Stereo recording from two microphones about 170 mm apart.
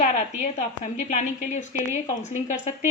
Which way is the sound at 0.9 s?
45° left (ahead or behind).